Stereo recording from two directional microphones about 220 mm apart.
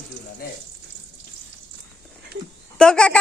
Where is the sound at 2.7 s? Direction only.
5° left (ahead or behind).